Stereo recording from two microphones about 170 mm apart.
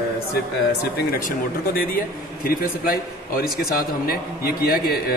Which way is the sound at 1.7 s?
60° left (ahead or behind).